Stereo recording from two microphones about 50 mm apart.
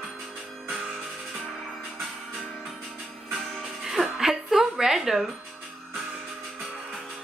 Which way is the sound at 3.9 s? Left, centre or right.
Centre.